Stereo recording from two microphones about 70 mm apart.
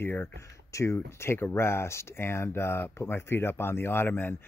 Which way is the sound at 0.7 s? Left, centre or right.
Left.